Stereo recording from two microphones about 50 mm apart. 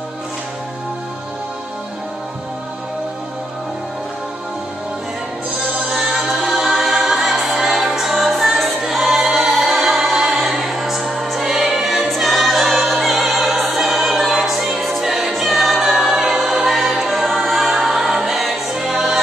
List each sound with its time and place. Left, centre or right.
5.9 s music: centre
16.1 s choir: centre